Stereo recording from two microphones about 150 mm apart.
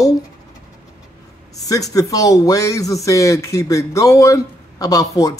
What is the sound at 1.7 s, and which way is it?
Speech, 25° left (ahead or behind).